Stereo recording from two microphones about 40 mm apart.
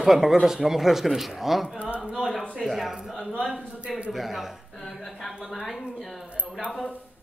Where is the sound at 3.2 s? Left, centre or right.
Left.